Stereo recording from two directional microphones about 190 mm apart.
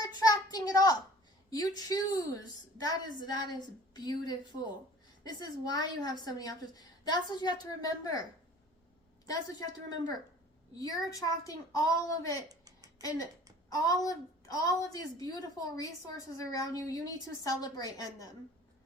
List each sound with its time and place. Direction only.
0.0 s a sound: 20° left (ahead or behind)
1.5 s a woman's voice: 20° left (ahead or behind)
9.2 s a woman's voice: 20° left (ahead or behind)
10.8 s a woman's voice: 20° left (ahead or behind)
12.5 s a sound: 20° right (ahead or behind)
13.0 s a woman's voice: 20° left (ahead or behind)